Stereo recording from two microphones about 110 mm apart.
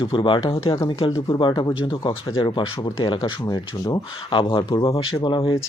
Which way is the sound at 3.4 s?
35° left (ahead or behind).